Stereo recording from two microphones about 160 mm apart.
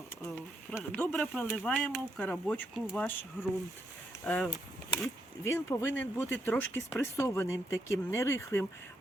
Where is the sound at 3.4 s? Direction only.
15° left (ahead or behind).